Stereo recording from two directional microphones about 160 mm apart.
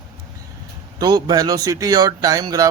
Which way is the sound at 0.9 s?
25° right (ahead or behind).